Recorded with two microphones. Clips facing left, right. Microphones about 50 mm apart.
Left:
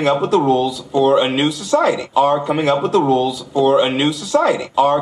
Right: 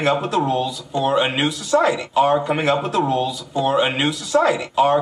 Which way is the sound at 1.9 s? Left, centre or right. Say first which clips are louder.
Left 2 dB; centre.